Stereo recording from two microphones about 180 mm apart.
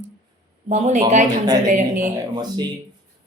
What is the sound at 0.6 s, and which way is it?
Speech, 40° right (ahead or behind).